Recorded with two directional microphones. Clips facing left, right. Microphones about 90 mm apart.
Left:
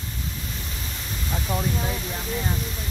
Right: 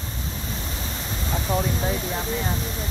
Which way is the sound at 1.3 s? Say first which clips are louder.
Right 3 dB; 25° right (ahead or behind).